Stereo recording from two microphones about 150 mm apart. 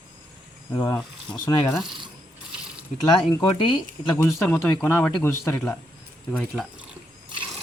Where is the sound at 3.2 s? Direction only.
35° left (ahead or behind).